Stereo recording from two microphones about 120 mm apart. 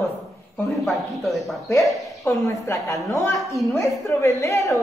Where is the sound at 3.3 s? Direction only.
Centre (ahead or behind).